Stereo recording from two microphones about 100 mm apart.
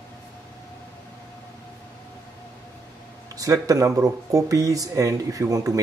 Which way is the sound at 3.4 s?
35° right (ahead or behind).